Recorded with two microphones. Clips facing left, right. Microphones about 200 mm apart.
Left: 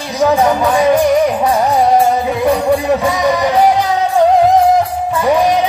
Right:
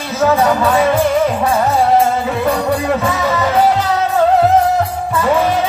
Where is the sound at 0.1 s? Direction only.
15° left (ahead or behind).